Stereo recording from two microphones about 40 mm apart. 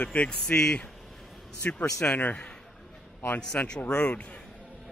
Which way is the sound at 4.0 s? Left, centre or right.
Left.